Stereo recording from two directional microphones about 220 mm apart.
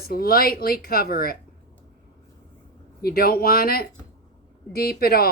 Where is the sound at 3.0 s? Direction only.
45° left (ahead or behind).